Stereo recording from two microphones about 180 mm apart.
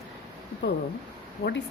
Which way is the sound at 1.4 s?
75° left (ahead or behind).